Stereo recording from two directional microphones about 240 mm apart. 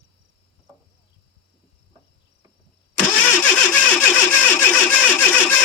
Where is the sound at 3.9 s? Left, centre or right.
Centre.